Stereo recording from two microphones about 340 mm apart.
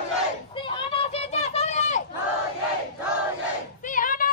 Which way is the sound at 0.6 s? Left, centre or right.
Centre.